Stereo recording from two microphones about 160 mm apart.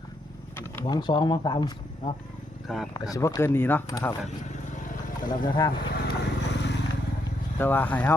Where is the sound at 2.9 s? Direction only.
20° left (ahead or behind).